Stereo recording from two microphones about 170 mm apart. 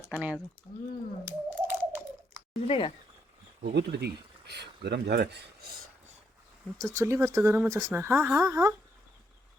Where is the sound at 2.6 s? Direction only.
30° left (ahead or behind).